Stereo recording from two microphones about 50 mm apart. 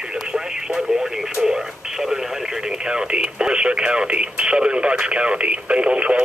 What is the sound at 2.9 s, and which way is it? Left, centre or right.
Speech, centre.